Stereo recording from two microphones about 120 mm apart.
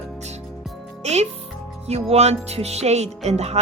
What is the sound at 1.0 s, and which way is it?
A child's voice, 65° right (ahead or behind).